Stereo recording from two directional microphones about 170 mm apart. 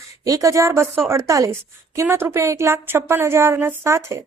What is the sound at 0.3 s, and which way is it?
A woman's voice, 20° right (ahead or behind).